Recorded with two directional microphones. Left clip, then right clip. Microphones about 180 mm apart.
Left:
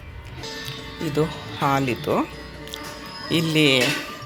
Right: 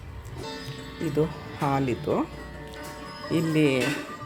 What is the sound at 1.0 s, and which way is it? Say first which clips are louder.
Speech: left 3 dB; 5° right (ahead or behind).